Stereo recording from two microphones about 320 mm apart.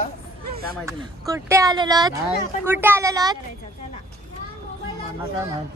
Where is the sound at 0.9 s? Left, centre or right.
Centre.